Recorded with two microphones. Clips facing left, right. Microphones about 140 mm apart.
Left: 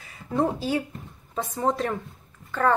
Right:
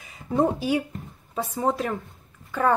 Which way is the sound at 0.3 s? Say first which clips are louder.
Right 2 dB; 15° right (ahead or behind).